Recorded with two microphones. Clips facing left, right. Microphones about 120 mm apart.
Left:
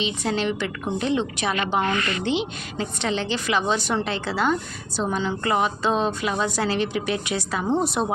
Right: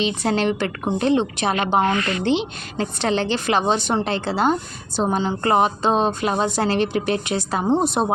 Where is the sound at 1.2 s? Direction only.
25° right (ahead or behind).